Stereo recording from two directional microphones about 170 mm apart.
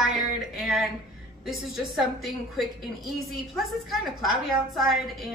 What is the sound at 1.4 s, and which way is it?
A woman's voice, centre (ahead or behind).